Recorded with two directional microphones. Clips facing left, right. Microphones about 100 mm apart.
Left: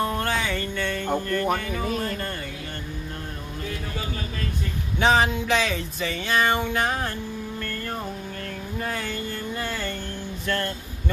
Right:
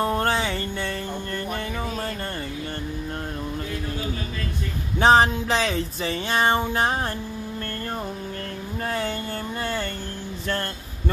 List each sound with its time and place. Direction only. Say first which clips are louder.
0.0 s music: right 3 dB; 35° right (ahead or behind)
4.9 s speech: right 4 dB; 35° right (ahead or behind)
8.9 s a sound: right 3 dB; 35° right (ahead or behind)
10.4 s speech: left 1 dB; 35° right (ahead or behind)